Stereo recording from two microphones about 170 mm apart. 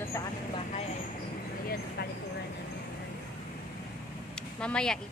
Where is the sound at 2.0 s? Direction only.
65° left (ahead or behind).